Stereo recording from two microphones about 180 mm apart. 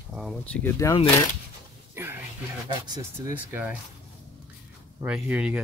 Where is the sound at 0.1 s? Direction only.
Centre (ahead or behind).